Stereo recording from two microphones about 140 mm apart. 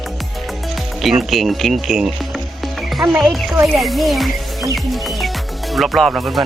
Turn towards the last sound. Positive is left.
turn(degrees=0)  # may be behind; listen again after turning